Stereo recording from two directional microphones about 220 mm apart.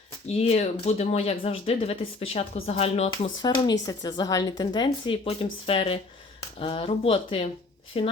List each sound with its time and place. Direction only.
0.3 s speech: 30° left (ahead or behind)